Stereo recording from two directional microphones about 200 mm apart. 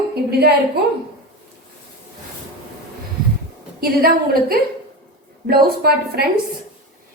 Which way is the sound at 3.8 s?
45° right (ahead or behind).